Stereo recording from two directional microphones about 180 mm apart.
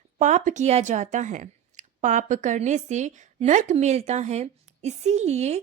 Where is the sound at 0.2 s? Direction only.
45° right (ahead or behind).